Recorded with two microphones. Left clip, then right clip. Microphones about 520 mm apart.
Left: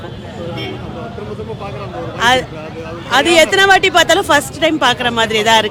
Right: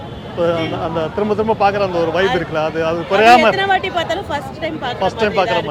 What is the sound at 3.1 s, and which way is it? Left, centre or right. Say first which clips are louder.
Speech: even; left.